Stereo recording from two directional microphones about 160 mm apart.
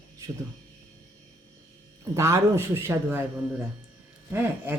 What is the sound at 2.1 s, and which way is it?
A man's voice, 20° right (ahead or behind).